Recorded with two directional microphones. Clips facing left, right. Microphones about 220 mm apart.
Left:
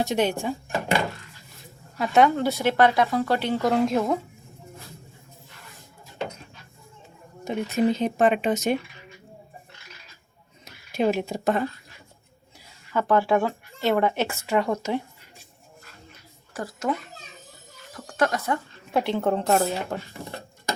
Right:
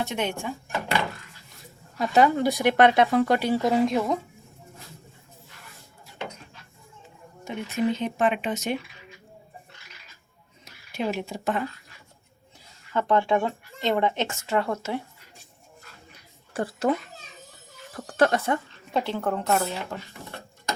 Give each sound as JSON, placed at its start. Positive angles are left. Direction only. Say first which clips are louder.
{"t": 0.0, "sound": "speech", "louder": "left 5 dB", "side_deg": 35}
{"t": 2.0, "sound": "speech", "louder": "left 1 dB", "side_deg": 0}
{"t": 7.4, "sound": "speech", "louder": "left 3 dB", "side_deg": 35}
{"t": 10.9, "sound": "speech", "louder": "left 5 dB", "side_deg": 45}
{"t": 12.9, "sound": "speech", "louder": "left 1 dB", "side_deg": 5}
{"t": 16.5, "sound": "speech", "louder": "right 4 dB", "side_deg": -30}
{"t": 17.9, "sound": "speech", "louder": "right 3 dB", "side_deg": -35}
{"t": 18.9, "sound": "speech", "louder": "left 3 dB", "side_deg": 15}
{"t": 19.2, "sound": "a woman's voice", "louder": "left 3 dB", "side_deg": 30}